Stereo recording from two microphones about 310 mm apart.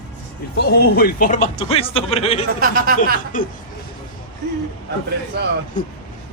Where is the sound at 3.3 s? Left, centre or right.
Left.